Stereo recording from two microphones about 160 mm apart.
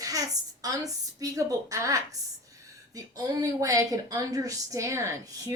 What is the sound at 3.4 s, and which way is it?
A woman's voice, 20° right (ahead or behind).